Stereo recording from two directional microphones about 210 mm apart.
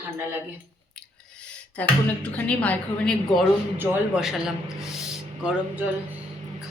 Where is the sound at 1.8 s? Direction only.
5° left (ahead or behind).